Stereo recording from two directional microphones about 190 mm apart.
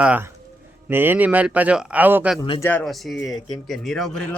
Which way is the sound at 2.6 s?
5° left (ahead or behind).